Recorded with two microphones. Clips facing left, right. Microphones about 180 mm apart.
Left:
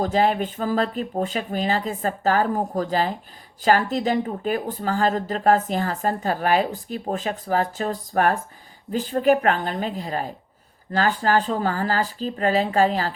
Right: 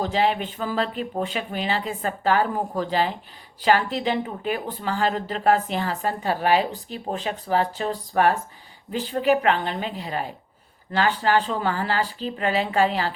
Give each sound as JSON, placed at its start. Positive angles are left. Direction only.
{"t": 0.0, "sound": "a woman's voice", "side_deg": 45}